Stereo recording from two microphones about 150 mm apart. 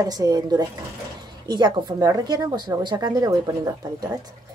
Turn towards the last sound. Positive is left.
turn(degrees=-25)  # may be behind; listen again after turning